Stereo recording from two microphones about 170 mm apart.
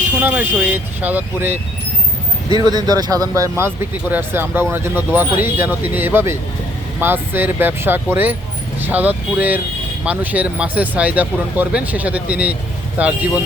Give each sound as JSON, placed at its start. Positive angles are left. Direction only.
{"t": 0.1, "sound": "speech", "side_deg": -10}
{"t": 2.5, "sound": "speech", "side_deg": -25}